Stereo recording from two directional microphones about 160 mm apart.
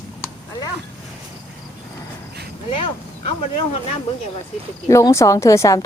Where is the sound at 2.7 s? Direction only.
35° left (ahead or behind).